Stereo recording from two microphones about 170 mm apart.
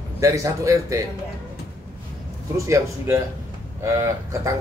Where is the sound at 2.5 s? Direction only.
20° right (ahead or behind).